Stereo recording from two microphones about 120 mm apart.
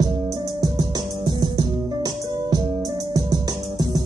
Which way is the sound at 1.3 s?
35° right (ahead or behind).